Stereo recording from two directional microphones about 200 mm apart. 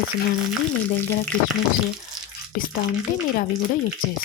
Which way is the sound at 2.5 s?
45° left (ahead or behind).